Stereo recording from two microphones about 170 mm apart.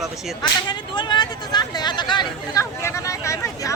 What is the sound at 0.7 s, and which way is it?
Speech, 25° left (ahead or behind).